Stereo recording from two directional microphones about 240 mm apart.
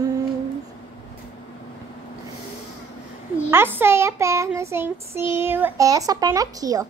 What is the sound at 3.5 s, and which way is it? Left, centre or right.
Child singing, centre.